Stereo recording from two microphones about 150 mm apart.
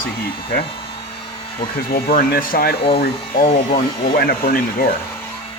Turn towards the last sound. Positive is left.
turn(degrees=80)